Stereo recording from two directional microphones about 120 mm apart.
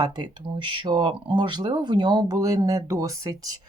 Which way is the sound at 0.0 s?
35° right (ahead or behind).